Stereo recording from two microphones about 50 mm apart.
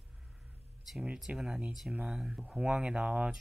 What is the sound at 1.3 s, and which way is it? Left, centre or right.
Speech, right.